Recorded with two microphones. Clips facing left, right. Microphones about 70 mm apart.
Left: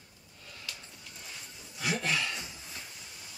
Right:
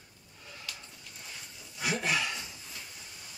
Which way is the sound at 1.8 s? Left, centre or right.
Centre.